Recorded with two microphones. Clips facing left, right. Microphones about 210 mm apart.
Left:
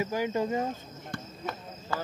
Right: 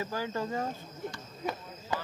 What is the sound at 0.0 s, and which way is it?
Speech, 15° left (ahead or behind).